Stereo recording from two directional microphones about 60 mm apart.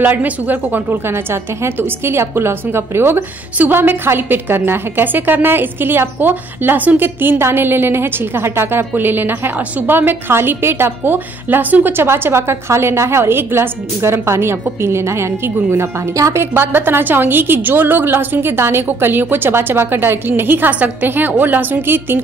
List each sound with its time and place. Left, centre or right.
0.0 s a woman's voice: right
11.4 s a woman's voice: right
12.1 s a woman's voice: right
16.2 s a woman's voice: right
16.5 s a woman's voice: right